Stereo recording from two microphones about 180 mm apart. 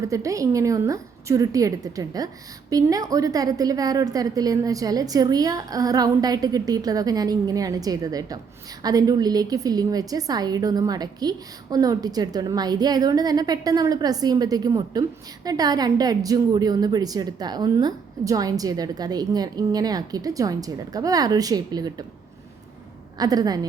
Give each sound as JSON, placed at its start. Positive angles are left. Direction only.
{"t": 0.0, "sound": "a woman's voice", "side_deg": -20}
{"t": 23.1, "sound": "a woman's voice", "side_deg": -20}